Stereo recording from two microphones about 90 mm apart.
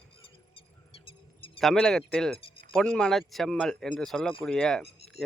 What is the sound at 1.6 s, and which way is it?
Speech, 5° left (ahead or behind).